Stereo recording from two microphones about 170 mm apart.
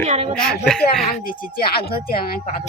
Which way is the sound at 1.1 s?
55° left (ahead or behind).